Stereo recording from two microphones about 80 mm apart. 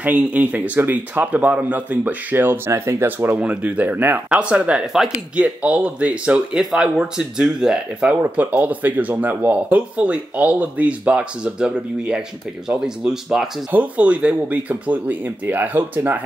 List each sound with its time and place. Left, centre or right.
0.0 s speech: centre
13.7 s speech: centre